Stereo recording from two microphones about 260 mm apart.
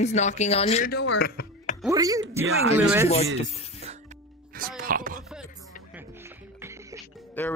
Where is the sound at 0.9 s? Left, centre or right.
Left.